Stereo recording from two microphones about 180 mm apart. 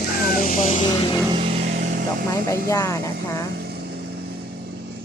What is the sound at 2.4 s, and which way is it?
A woman's voice, 15° left (ahead or behind).